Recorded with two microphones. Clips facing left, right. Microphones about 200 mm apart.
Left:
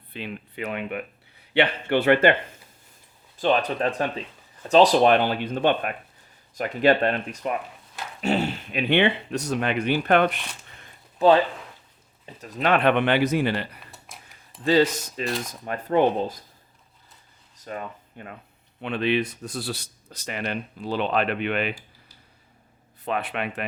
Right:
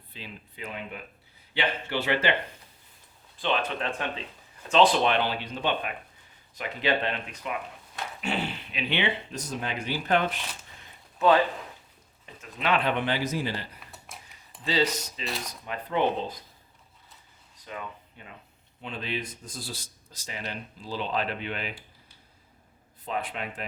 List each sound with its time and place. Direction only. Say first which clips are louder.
0.1 s speech: left 9 dB; 65° left (ahead or behind)
3.3 s speech: left 6 dB; 45° left (ahead or behind); by 10.4 s 60° left (ahead or behind)
11.2 s speech: left 4 dB; 35° left (ahead or behind); by 13.7 s 65° left (ahead or behind)
13.7 s a sound: left 1 dB; centre (ahead or behind)
14.6 s speech: left 7 dB; 50° left (ahead or behind)
17.6 s speech: left 5 dB; 45° left (ahead or behind)
18.8 s speech: left 10 dB; 70° left (ahead or behind)
23.0 s speech: left 5 dB; 70° left (ahead or behind)